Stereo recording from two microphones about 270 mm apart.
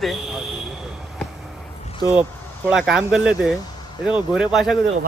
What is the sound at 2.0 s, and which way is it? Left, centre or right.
Speech, centre.